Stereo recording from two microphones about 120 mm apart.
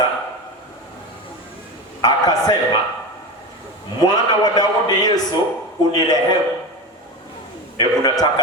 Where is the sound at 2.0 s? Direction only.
35° left (ahead or behind).